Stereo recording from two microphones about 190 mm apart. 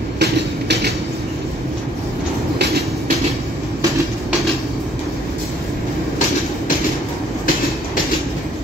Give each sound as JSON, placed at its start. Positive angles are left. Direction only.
{"t": 0.2, "sound": "train", "side_deg": -60}